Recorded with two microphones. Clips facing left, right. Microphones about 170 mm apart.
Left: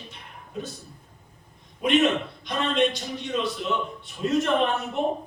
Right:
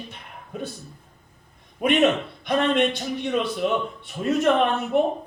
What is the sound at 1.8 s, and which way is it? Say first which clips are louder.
Speech: right 2 dB; 55° right (ahead or behind).